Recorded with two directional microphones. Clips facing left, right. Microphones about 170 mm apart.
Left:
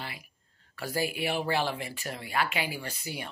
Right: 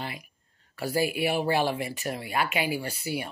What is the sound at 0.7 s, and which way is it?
Speech, 15° right (ahead or behind).